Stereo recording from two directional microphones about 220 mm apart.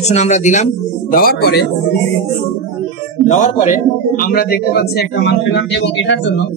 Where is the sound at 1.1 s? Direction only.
45° left (ahead or behind).